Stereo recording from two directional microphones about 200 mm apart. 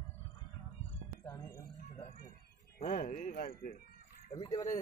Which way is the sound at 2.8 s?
35° left (ahead or behind).